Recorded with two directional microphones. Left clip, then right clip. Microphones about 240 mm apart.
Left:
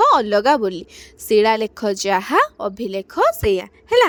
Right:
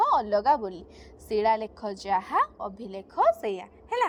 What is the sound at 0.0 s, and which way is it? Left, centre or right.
A woman's voice, left.